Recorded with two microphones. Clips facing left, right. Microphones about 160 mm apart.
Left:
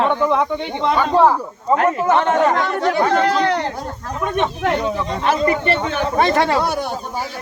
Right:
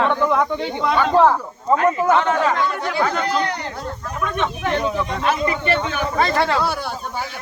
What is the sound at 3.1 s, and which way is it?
Speech, 90° left.